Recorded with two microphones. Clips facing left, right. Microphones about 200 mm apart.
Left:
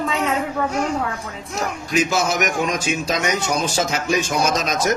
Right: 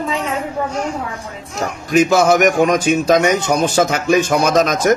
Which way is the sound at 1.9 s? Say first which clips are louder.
Right 9 dB; 55° right (ahead or behind).